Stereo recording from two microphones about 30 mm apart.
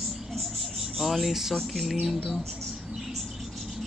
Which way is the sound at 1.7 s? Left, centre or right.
Centre.